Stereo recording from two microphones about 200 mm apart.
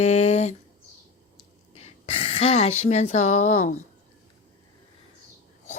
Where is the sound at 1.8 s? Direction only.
30° left (ahead or behind).